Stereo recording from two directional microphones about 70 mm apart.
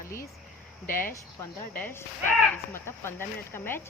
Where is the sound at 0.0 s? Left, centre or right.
Left.